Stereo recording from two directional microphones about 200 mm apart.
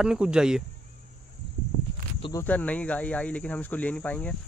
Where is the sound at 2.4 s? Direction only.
5° left (ahead or behind).